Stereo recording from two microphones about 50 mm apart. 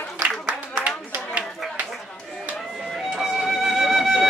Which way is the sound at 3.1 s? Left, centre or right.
Centre.